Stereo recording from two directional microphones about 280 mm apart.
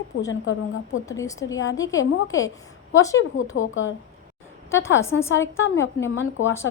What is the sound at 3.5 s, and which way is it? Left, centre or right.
Speech, left.